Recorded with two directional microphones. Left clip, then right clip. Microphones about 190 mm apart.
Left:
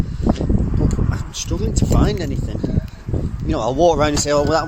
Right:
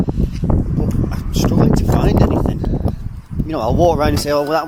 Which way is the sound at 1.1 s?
10° right (ahead or behind).